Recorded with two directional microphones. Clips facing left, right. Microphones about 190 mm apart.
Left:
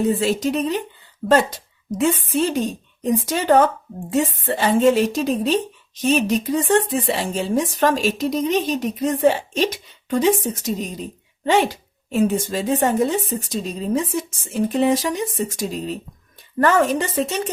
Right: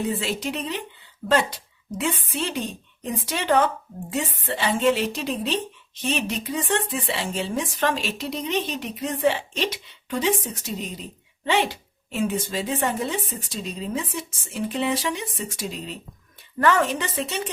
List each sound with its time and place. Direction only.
0.0 s a woman's voice: 45° left (ahead or behind)